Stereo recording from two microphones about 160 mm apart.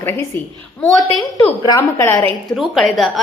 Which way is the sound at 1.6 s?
20° left (ahead or behind).